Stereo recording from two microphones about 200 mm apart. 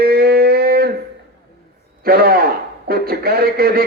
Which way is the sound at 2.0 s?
50° right (ahead or behind).